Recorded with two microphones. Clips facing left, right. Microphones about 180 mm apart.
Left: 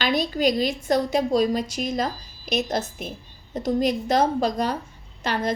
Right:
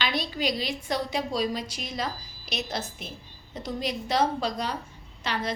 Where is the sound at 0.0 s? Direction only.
45° left (ahead or behind).